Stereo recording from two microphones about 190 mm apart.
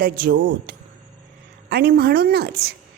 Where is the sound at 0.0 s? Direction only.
55° right (ahead or behind).